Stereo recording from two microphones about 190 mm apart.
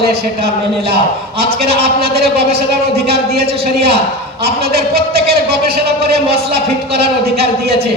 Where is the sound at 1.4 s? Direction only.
55° right (ahead or behind).